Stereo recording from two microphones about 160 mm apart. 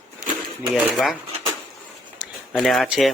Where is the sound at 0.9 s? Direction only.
Centre (ahead or behind).